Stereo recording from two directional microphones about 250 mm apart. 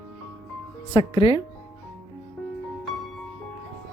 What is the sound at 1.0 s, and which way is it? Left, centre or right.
Speech, left.